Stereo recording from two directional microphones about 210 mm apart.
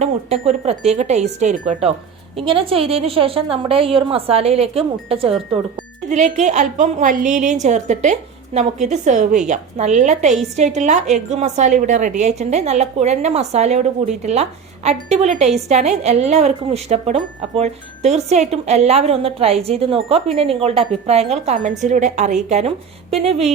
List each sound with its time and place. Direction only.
0.0 s a woman's voice: 30° right (ahead or behind)